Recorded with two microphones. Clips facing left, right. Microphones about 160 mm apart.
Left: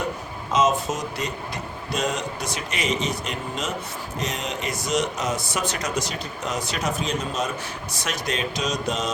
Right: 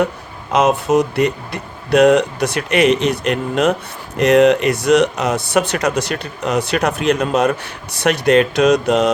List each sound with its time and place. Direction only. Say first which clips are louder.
0.5 s speech: right 8 dB; 65° right (ahead or behind)